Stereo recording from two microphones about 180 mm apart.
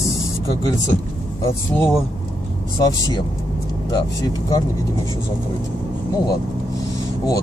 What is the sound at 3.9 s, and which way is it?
Speech, 20° left (ahead or behind).